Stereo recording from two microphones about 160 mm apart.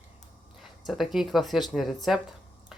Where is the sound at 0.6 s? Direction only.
Centre (ahead or behind).